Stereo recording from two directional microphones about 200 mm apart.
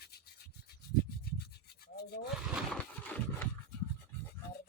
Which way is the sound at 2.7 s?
10° left (ahead or behind).